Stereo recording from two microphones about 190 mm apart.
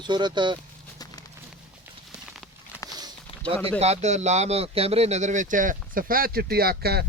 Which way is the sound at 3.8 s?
35° right (ahead or behind).